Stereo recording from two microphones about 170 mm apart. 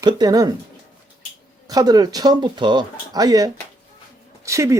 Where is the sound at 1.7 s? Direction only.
25° right (ahead or behind).